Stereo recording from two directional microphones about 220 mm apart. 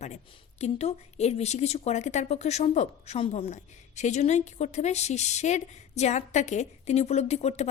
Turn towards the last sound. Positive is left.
turn(degrees=30)  # may be behind; listen again after turning